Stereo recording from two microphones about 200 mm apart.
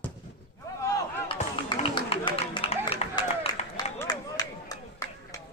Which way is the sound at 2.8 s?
30° left (ahead or behind).